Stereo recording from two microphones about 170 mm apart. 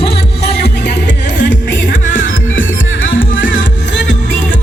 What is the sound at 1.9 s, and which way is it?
Music, 50° left (ahead or behind).